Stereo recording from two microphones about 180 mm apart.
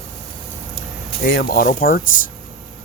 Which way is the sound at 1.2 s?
55° left (ahead or behind).